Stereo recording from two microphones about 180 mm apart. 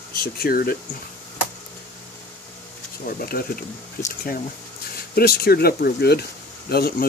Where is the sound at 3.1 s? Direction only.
55° left (ahead or behind).